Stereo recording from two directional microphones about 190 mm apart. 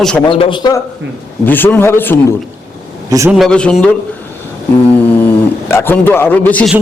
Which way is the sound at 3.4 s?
5° left (ahead or behind).